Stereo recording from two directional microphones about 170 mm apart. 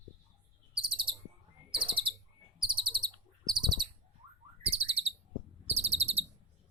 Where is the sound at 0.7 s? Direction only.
30° right (ahead or behind).